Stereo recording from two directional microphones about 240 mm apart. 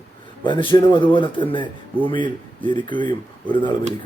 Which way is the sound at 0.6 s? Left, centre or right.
Left.